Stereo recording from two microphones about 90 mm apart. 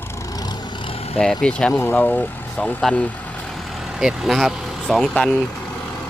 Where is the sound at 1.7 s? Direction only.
25° left (ahead or behind).